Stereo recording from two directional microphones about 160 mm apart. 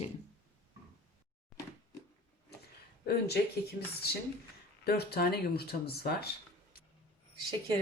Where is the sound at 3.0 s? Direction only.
85° left.